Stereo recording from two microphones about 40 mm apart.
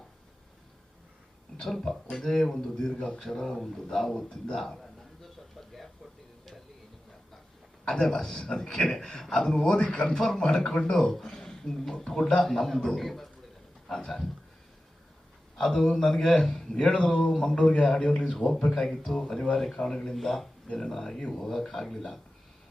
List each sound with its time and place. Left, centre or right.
1.6 s speech: centre
4.5 s a sound: centre
7.9 s a man's voice: centre
15.7 s speech: centre
18.4 s speech: centre